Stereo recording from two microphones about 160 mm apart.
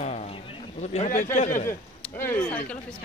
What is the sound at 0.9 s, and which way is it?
Speech, 50° left (ahead or behind).